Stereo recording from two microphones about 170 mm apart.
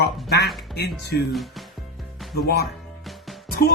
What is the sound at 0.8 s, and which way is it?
Speech, 75° left (ahead or behind).